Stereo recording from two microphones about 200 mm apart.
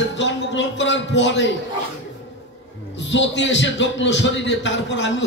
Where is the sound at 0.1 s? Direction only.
65° left (ahead or behind).